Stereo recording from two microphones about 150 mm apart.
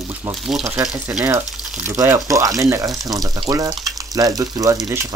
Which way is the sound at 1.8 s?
20° right (ahead or behind).